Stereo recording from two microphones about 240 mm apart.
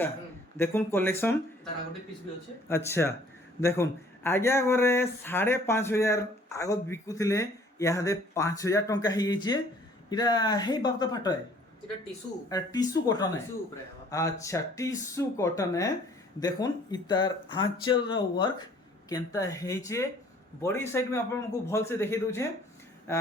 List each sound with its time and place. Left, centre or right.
0.5 s speech: centre
2.6 s speech: centre
12.5 s speech: centre